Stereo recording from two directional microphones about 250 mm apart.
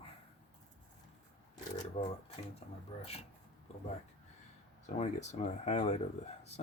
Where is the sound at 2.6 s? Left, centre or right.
Left.